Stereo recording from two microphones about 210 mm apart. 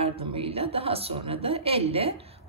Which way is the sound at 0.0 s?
25° right (ahead or behind).